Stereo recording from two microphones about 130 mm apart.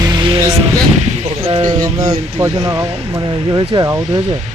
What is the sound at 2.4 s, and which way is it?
Speech, 25° right (ahead or behind).